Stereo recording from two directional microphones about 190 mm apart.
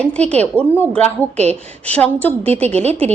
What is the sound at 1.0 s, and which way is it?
Speech, 35° right (ahead or behind).